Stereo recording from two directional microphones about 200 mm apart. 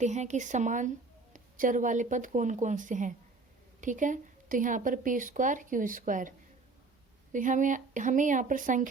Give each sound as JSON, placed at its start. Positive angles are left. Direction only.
{"t": 0.0, "sound": "speech", "side_deg": -35}
{"t": 7.3, "sound": "speech", "side_deg": -40}